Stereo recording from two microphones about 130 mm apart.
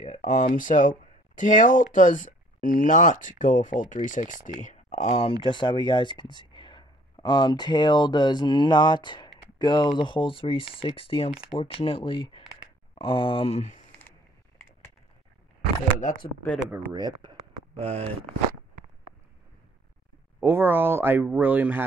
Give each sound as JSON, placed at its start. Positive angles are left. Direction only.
{"t": 0.0, "sound": "speech", "side_deg": 75}
{"t": 5.4, "sound": "speech", "side_deg": 35}
{"t": 16.9, "sound": "speech", "side_deg": -30}
{"t": 17.7, "sound": "speech", "side_deg": -55}
{"t": 20.3, "sound": "speech", "side_deg": -15}